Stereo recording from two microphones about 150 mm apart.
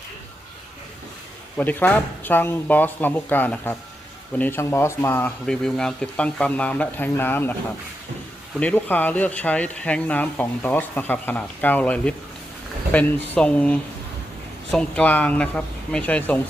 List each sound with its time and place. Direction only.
1.5 s speech: 10° left (ahead or behind)
8.5 s speech: 10° left (ahead or behind)